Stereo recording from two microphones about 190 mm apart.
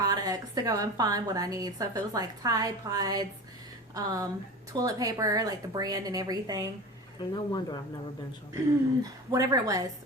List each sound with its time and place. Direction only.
0.0 s a woman's voice: 20° right (ahead or behind)
7.2 s speech: 20° left (ahead or behind)
9.3 s a woman's voice: 15° right (ahead or behind)